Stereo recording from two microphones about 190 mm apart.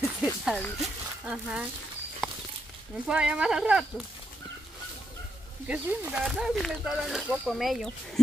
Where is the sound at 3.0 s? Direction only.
5° right (ahead or behind).